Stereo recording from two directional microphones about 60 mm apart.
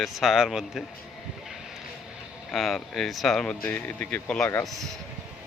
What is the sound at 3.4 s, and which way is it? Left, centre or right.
Speech, centre.